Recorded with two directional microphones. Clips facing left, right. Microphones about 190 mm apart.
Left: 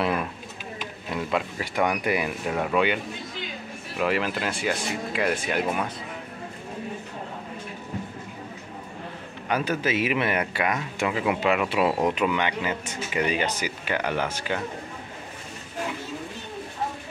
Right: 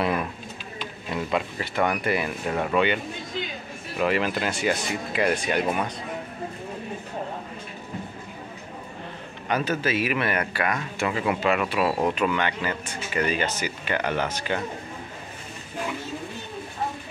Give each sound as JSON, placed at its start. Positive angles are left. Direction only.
{"t": 1.6, "sound": "speech", "side_deg": 10}
{"t": 4.0, "sound": "speech", "side_deg": 0}
{"t": 9.5, "sound": "speech", "side_deg": 10}